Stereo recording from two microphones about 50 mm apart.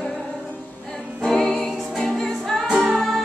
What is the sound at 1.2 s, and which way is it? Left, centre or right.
Music, centre.